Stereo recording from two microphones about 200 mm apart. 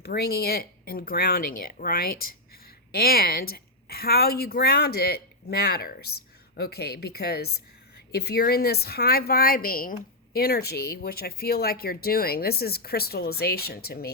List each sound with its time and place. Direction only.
0.0 s a woman's voice: 50° left (ahead or behind)